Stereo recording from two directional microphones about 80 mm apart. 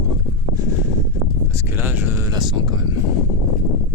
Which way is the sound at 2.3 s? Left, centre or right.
Right.